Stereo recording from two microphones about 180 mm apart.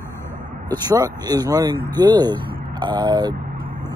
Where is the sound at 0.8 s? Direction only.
20° right (ahead or behind).